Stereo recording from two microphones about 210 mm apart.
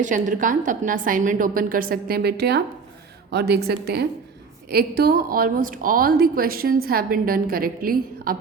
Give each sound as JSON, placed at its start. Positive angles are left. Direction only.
{"t": 0.0, "sound": "a woman's voice", "side_deg": -40}